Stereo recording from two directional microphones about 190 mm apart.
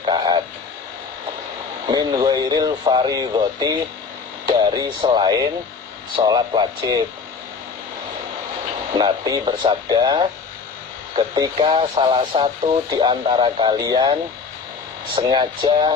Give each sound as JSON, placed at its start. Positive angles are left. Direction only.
{"t": 0.0, "sound": "frog", "side_deg": -25}
{"t": 1.9, "sound": "speech", "side_deg": -20}
{"t": 9.0, "sound": "speech", "side_deg": -20}
{"t": 11.3, "sound": "speech", "side_deg": -30}